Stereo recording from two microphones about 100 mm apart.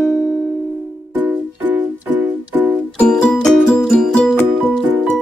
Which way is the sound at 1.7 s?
20° right (ahead or behind).